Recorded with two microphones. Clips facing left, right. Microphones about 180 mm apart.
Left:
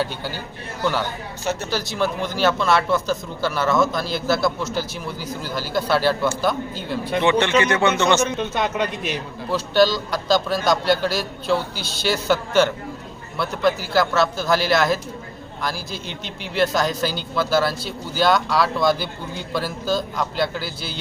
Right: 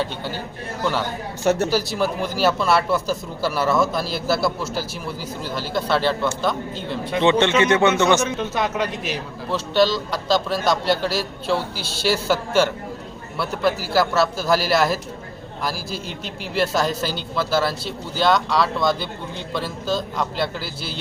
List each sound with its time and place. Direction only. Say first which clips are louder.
1.5 s speech: right 6 dB; 55° right (ahead or behind)
2.0 s a man's voice: even; 5° right (ahead or behind)
7.2 s speech: right 1 dB; 20° right (ahead or behind)
8.2 s a man's voice: left 1 dB; centre (ahead or behind)